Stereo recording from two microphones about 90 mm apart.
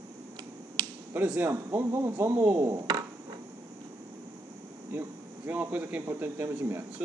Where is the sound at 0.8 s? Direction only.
45° right (ahead or behind).